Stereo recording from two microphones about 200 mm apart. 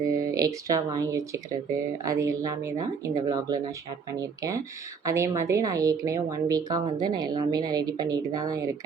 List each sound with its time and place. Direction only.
0.3 s a woman's voice: 15° right (ahead or behind)